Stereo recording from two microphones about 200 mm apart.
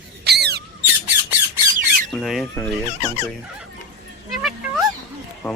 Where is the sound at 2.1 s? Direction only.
Centre (ahead or behind).